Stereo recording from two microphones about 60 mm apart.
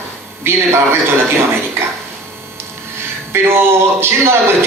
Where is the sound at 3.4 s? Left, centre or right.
Right.